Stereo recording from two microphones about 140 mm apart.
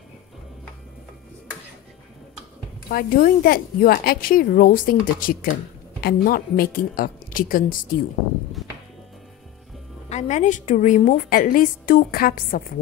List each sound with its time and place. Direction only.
2.9 s a woman's voice: 90° left
10.0 s a woman's voice: 55° left (ahead or behind)
11.2 s a woman's voice: 80° left